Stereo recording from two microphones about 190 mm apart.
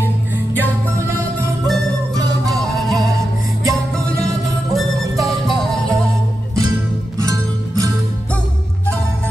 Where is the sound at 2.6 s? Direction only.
Centre (ahead or behind).